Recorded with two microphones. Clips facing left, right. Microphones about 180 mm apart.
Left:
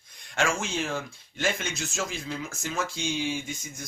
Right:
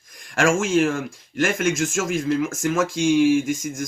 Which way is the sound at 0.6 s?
90° right.